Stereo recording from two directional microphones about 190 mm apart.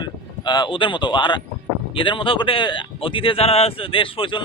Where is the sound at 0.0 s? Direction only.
25° left (ahead or behind).